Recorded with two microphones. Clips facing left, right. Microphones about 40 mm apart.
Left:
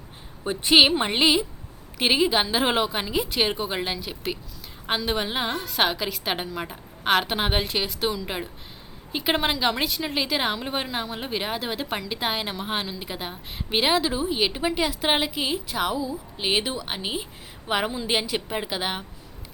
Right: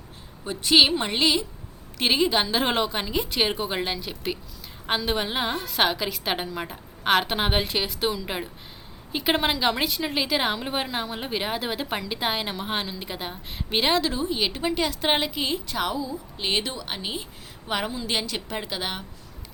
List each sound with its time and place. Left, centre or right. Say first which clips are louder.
0.4 s a woman's voice: left 2 dB; left